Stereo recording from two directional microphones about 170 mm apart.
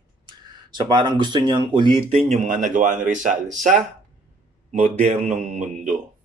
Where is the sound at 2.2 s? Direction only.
45° right (ahead or behind).